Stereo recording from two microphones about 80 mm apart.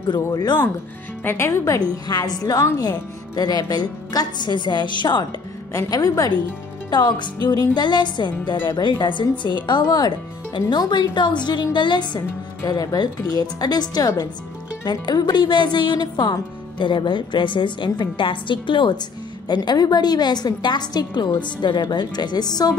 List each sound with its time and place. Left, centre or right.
0.1 s a woman's voice: left
1.2 s a woman's voice: left
2.0 s a woman's voice: left
5.9 s a woman's voice: left
6.9 s a woman's voice: left
9.4 s a woman's voice: left
10.8 s a woman's voice: left
12.6 s a woman's voice: left
14.9 s a woman's voice: left
19.4 s a woman's voice: left